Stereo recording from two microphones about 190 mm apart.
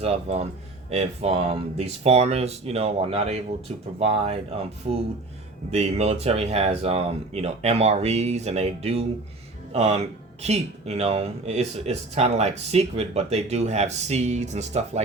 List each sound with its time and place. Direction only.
0.0 s speech: 30° right (ahead or behind)